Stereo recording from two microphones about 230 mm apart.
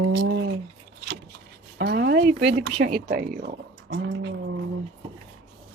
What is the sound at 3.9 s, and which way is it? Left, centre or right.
Speech, right.